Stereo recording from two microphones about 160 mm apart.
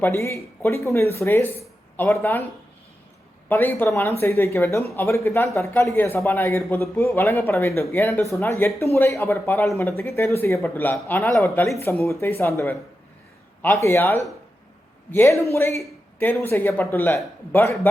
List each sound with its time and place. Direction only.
0.0 s speech: 15° left (ahead or behind)
3.5 s speech: 15° left (ahead or behind)